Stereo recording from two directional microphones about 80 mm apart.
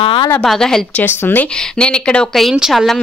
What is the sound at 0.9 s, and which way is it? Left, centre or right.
Speech, left.